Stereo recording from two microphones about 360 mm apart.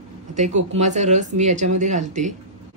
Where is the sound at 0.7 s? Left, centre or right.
Centre.